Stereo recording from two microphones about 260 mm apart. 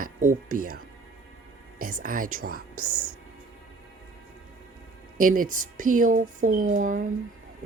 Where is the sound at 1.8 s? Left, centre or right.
Right.